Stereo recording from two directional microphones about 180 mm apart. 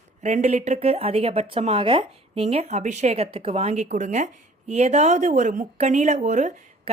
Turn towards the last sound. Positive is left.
turn(degrees=-40)  # may be behind; listen again after turning